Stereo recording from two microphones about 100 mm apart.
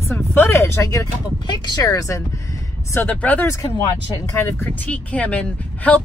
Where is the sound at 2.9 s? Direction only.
20° left (ahead or behind).